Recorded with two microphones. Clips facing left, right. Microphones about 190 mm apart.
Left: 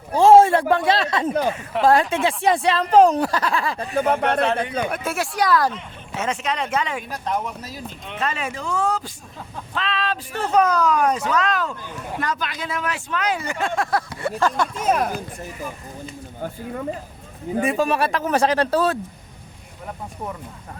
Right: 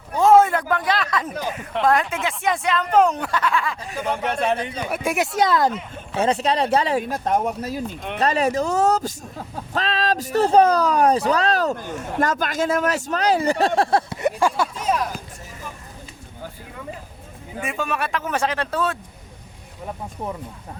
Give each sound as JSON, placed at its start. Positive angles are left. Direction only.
{"t": 0.1, "sound": "a sound", "side_deg": 30}
{"t": 0.7, "sound": "speech", "side_deg": 25}
{"t": 3.8, "sound": "speech", "side_deg": 60}
{"t": 4.9, "sound": "speech", "side_deg": -15}
{"t": 6.1, "sound": "speech", "side_deg": -35}
{"t": 7.1, "sound": "speech", "side_deg": -45}
{"t": 8.2, "sound": "speech", "side_deg": -40}
{"t": 14.8, "sound": "speech", "side_deg": 50}
{"t": 17.5, "sound": "speech", "side_deg": 35}